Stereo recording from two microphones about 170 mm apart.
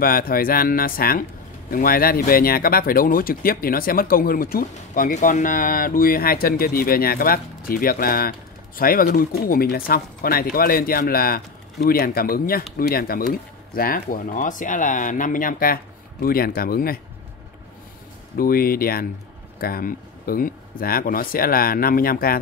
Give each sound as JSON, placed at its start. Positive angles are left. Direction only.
{"t": 0.0, "sound": "speech", "side_deg": 60}
{"t": 18.4, "sound": "speech", "side_deg": 60}